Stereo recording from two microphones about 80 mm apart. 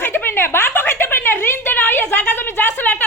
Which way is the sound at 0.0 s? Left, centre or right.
Left.